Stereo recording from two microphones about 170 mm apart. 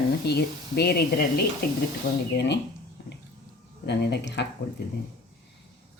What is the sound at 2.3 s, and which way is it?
Speech, 90° left.